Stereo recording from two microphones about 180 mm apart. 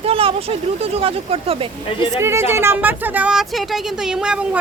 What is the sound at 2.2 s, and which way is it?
Speech, 15° right (ahead or behind).